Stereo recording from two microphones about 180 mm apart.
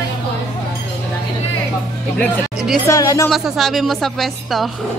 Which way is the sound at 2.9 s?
20° left (ahead or behind).